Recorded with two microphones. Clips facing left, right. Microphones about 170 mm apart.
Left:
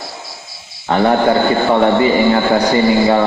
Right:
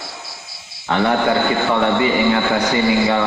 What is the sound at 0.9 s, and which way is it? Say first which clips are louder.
A man's voice: left 4 dB; 40° left (ahead or behind).